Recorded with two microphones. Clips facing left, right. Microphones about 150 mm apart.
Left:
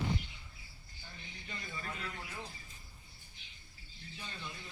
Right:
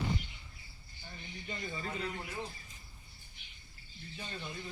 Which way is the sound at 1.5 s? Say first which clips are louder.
Right 4 dB; 30° right (ahead or behind).